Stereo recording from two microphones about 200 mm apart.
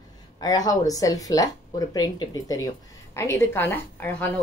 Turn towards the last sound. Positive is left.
turn(degrees=10)  # may be behind; listen again after turning